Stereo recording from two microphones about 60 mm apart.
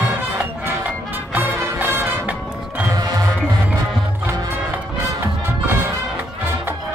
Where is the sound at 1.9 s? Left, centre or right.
Right.